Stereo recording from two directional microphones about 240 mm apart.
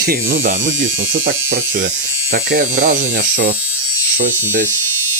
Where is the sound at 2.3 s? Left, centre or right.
Right.